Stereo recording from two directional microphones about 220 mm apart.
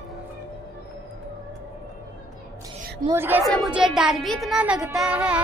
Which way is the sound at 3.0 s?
10° right (ahead or behind).